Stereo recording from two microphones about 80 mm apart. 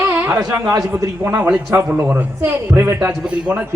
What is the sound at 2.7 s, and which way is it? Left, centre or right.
Speech, right.